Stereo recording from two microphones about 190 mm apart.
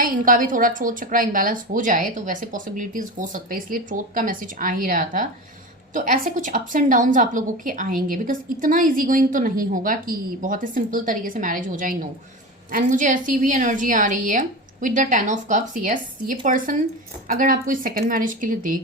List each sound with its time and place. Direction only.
0.0 s a woman's voice: 45° right (ahead or behind)